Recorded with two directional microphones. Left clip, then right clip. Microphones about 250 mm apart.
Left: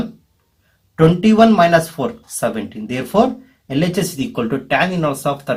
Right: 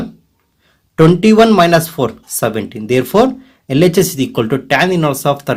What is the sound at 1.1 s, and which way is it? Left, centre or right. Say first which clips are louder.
Speech: right 2 dB; right.